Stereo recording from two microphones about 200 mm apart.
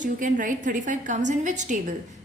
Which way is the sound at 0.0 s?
40° right (ahead or behind).